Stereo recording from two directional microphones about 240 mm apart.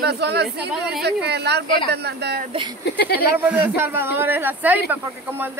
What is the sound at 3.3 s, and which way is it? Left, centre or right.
A man's voice, centre.